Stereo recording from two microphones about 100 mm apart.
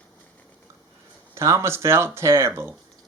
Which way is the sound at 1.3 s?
30° right (ahead or behind).